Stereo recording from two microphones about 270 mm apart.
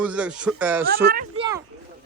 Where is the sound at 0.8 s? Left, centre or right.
Right.